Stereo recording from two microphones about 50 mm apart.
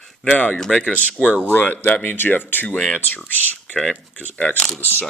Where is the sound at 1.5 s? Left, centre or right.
Left.